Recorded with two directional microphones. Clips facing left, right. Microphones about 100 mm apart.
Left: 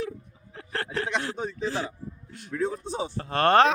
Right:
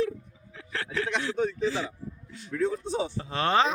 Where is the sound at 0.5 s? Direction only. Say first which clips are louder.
Left 1 dB; 50° left (ahead or behind).